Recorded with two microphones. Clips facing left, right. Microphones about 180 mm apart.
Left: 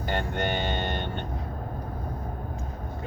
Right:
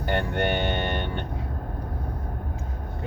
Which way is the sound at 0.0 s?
60° right (ahead or behind).